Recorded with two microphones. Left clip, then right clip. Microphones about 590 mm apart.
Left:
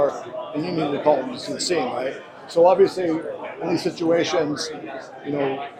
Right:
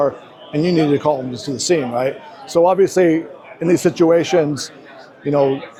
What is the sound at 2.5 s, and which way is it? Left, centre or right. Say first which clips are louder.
Speech: right 3 dB; right.